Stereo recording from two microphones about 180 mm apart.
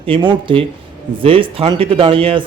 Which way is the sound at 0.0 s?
30° right (ahead or behind).